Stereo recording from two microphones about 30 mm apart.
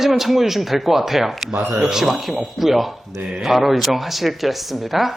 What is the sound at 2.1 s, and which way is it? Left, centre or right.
Speech, centre.